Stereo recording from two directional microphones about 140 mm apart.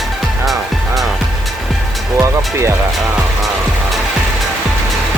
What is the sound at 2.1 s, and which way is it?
Music, 20° right (ahead or behind).